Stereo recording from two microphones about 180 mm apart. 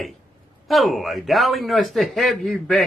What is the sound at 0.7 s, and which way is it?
Speech, centre (ahead or behind).